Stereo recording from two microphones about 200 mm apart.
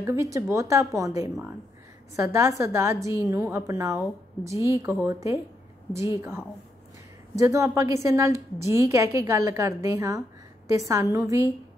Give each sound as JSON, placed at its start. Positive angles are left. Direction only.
{"t": 0.0, "sound": "a woman's voice", "side_deg": -15}
{"t": 7.3, "sound": "a woman's voice", "side_deg": -15}